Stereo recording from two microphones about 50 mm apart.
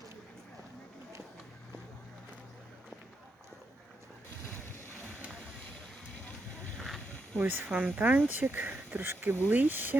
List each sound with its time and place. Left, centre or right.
6.7 s a sound: centre
7.3 s speech: right
7.7 s speech: right
9.0 s speech: right